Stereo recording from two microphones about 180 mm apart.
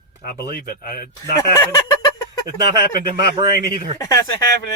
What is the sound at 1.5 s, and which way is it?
Fowl, 20° left (ahead or behind).